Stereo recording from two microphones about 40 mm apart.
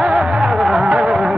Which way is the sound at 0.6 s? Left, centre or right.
Centre.